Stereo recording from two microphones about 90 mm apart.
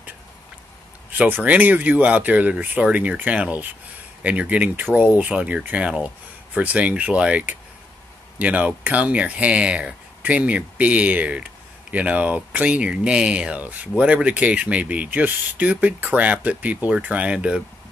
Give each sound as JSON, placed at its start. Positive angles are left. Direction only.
{"t": 1.1, "sound": "speech", "side_deg": -20}